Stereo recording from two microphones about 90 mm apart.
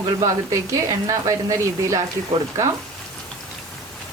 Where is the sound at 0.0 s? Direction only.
40° right (ahead or behind).